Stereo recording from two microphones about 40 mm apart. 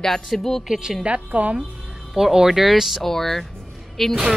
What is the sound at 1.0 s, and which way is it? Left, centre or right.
Speech, right.